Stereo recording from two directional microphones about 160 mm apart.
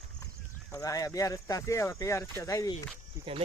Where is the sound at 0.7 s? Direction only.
20° left (ahead or behind).